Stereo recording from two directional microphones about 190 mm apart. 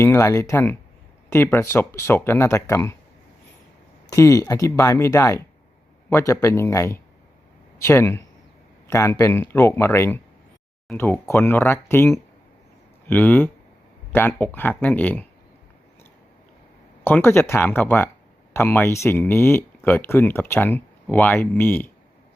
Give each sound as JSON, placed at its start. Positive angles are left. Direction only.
{"t": 0.0, "sound": "speech", "side_deg": 15}
{"t": 4.1, "sound": "speech", "side_deg": 15}
{"t": 17.0, "sound": "speech", "side_deg": 10}